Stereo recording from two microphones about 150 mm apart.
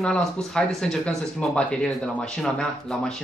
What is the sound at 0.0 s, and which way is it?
Speech, 5° left (ahead or behind).